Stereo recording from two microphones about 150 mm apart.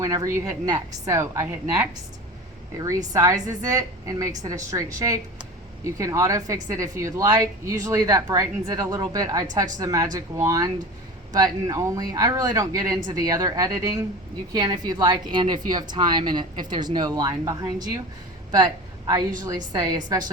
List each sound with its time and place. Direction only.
0.0 s a woman's voice: 20° right (ahead or behind)